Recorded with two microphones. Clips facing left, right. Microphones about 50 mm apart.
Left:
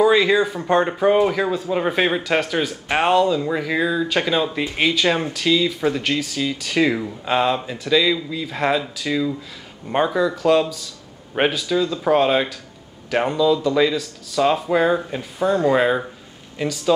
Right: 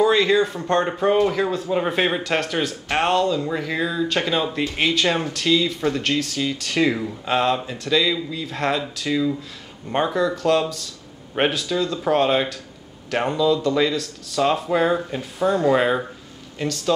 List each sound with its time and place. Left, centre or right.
0.0 s speech: centre